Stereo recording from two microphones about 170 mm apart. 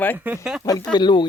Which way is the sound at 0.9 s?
25° left (ahead or behind).